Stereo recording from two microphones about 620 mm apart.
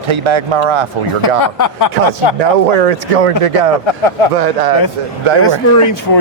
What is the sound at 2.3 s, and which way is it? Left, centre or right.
Speech, right.